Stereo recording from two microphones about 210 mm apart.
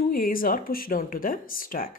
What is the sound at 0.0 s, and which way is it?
Speech, 45° left (ahead or behind).